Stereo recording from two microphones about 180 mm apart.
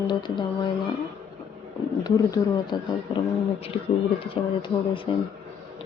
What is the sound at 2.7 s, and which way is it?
Speech, 25° left (ahead or behind).